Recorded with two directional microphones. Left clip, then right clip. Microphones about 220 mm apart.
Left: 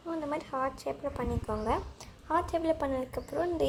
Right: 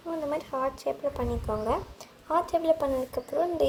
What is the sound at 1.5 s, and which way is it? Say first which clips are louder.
A woman's voice: right 2 dB; 40° left (ahead or behind).